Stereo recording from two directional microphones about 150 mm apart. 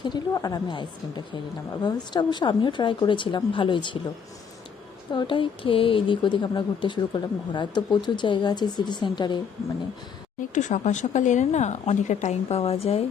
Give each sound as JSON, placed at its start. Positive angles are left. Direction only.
{"t": 0.0, "sound": "a woman's voice", "side_deg": 25}
{"t": 5.1, "sound": "a woman's voice", "side_deg": 35}
{"t": 10.5, "sound": "a woman's voice", "side_deg": 55}